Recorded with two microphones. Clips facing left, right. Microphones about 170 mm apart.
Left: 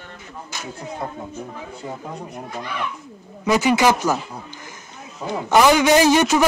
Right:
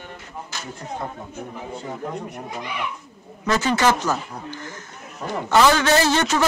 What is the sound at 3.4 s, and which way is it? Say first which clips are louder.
A man's voice: left 3 dB; 10° left (ahead or behind).